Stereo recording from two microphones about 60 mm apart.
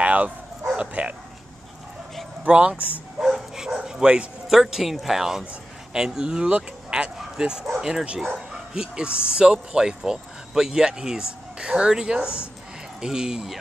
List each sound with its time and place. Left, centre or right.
0.0 s bow-wow: right
0.7 s speech: right
2.4 s speech: centre
3.2 s speech: centre
5.4 s speech: centre